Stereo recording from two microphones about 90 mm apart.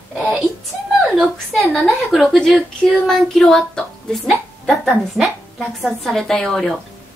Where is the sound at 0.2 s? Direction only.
20° right (ahead or behind).